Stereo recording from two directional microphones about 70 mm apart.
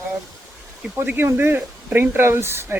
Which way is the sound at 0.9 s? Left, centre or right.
Right.